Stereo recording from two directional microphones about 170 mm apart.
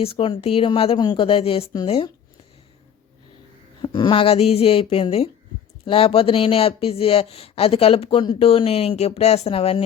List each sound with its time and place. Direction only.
0.0 s speech: 35° left (ahead or behind)
3.8 s speech: 30° left (ahead or behind)